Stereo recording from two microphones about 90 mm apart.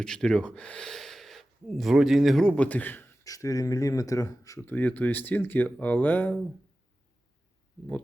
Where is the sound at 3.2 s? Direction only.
40° left (ahead or behind).